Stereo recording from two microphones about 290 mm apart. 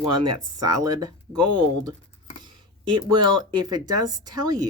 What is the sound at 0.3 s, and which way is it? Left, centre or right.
Speech, right.